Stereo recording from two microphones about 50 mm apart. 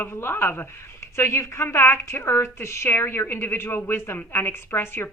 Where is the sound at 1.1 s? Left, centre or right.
Left.